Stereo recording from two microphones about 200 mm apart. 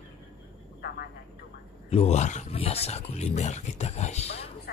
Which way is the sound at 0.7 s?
50° left (ahead or behind).